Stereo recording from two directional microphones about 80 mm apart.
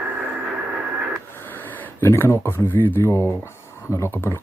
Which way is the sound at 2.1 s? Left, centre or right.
Left.